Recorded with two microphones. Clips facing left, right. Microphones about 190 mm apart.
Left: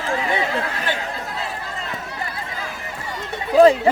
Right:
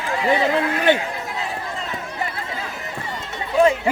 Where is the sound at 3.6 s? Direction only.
35° left (ahead or behind).